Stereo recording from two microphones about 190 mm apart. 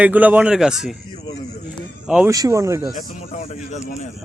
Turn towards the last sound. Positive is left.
turn(degrees=40)  # may be behind; listen again after turning